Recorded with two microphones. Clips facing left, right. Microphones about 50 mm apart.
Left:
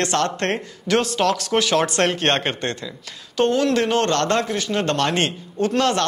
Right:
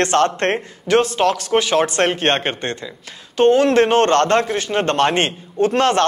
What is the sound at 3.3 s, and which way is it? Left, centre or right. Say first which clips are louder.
A man's voice: right 6 dB; right.